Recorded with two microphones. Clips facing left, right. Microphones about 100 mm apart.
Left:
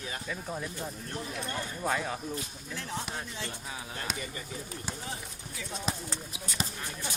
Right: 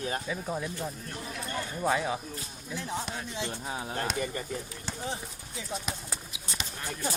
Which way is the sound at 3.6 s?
30° right (ahead or behind).